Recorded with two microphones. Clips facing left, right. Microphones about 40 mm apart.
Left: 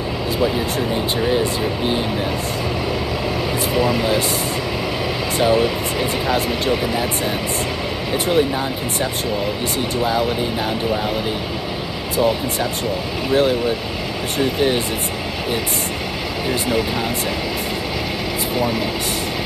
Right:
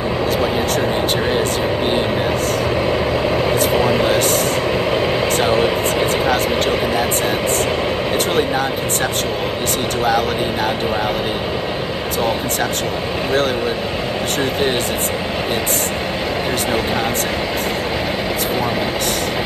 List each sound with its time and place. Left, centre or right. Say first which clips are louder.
3.7 s speech: left 1 dB; right
5.4 s speech: left 2 dB; right
8.3 s speech: left 3 dB; right
13.3 s speech: left 2 dB; right